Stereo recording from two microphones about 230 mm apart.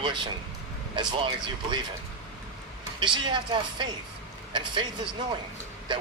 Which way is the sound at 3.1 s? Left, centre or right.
Centre.